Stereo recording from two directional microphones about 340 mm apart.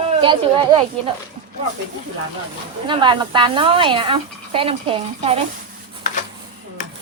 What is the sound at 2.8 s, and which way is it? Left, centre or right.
Speech, centre.